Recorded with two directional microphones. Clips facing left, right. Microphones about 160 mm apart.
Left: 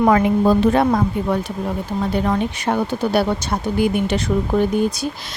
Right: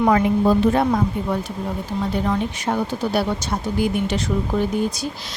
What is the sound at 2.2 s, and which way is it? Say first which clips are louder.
Speech: left 2 dB; 60° left (ahead or behind).